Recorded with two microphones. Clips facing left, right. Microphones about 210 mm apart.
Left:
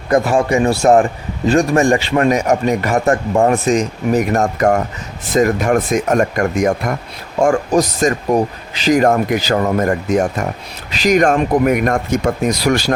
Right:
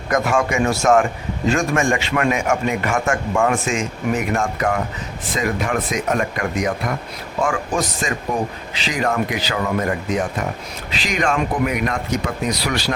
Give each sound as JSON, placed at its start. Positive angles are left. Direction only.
{"t": 0.1, "sound": "a man's voice", "side_deg": 30}